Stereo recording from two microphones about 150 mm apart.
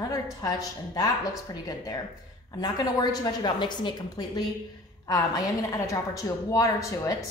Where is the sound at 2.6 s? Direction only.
25° left (ahead or behind).